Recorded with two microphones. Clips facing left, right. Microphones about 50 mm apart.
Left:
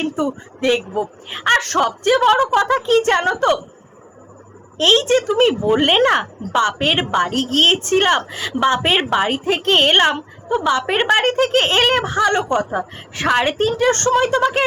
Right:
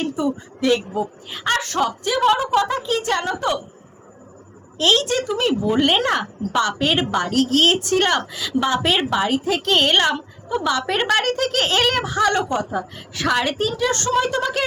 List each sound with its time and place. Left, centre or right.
0.2 s a woman's voice: left
0.6 s speech: left
1.6 s a woman's voice: left
4.8 s speech: left